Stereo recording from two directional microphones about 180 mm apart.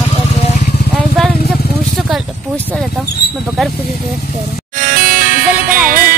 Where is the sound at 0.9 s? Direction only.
5° left (ahead or behind).